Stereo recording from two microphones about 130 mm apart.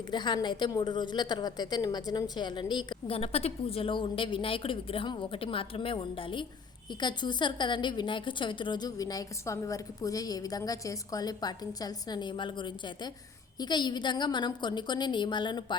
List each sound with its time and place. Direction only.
0.1 s a woman's voice: 35° left (ahead or behind)
3.2 s a woman's voice: 50° left (ahead or behind)